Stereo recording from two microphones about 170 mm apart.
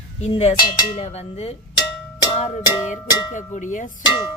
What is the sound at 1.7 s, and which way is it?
Cowbell, 25° left (ahead or behind).